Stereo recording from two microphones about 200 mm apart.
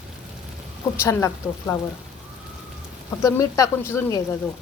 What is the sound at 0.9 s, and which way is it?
Speech, 15° left (ahead or behind).